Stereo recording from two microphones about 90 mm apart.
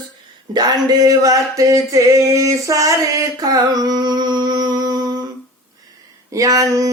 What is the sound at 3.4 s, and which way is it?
Humming, 45° right (ahead or behind).